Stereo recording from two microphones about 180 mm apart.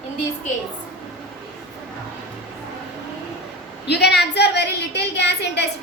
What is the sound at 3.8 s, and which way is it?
A woman's voice, 65° left (ahead or behind).